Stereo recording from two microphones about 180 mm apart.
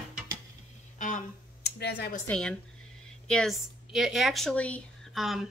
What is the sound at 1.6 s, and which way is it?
Speech, 65° left (ahead or behind).